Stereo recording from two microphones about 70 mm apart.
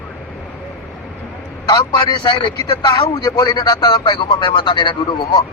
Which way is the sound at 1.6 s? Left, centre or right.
Left.